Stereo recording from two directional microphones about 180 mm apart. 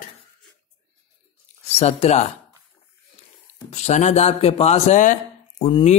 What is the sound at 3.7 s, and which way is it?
Speech, 35° left (ahead or behind).